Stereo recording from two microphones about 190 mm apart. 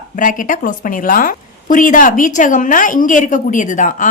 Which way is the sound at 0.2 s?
45° left (ahead or behind).